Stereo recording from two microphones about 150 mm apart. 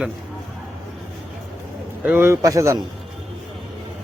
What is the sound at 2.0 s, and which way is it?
Speech, 15° right (ahead or behind).